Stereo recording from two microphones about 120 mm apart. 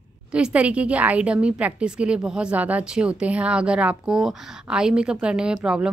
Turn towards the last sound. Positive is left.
turn(degrees=-10)  # may be behind; listen again after turning